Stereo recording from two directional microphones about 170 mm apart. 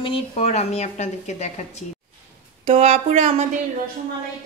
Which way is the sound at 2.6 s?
35° right (ahead or behind).